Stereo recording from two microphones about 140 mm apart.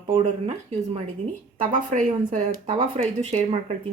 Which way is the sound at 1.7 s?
60° right (ahead or behind).